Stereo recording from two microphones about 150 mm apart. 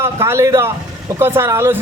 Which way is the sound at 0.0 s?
15° right (ahead or behind).